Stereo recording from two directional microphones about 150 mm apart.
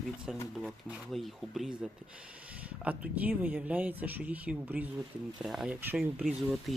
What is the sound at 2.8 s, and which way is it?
Speech, 10° right (ahead or behind).